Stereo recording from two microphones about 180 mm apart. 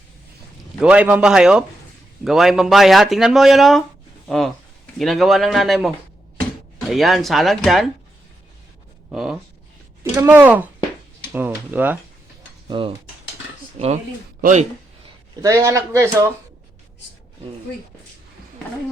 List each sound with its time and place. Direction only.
0.8 s speech: 5° right (ahead or behind)
9.0 s a man's voice: 5° right (ahead or behind)
12.6 s cutlery: 30° right (ahead or behind)
13.7 s speech: 35° right (ahead or behind)
15.4 s a man's voice: 15° right (ahead or behind)